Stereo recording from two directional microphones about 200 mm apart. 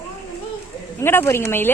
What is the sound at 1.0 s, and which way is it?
Speech, 10° left (ahead or behind).